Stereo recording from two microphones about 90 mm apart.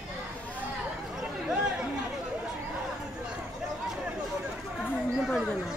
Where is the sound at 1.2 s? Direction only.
10° right (ahead or behind).